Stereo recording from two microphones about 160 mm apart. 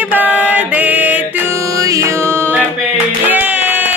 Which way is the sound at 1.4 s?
20° right (ahead or behind).